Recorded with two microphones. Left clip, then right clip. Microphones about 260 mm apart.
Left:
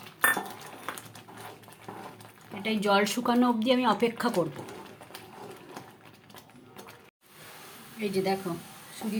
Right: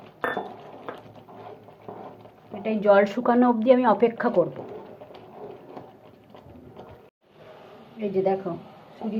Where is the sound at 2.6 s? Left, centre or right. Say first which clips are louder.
Right 7 dB; left.